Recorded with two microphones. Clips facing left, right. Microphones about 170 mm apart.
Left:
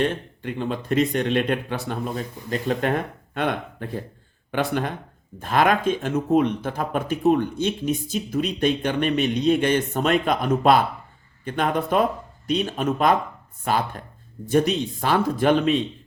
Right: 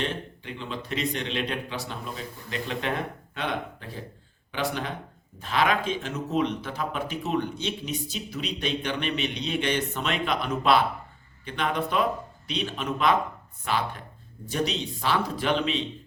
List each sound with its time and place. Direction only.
0.0 s speech: 50° left (ahead or behind)